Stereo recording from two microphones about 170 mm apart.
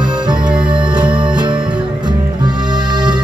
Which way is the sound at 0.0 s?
25° right (ahead or behind).